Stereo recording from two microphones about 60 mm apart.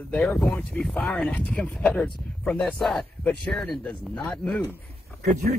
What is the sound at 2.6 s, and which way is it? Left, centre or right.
Speech, centre.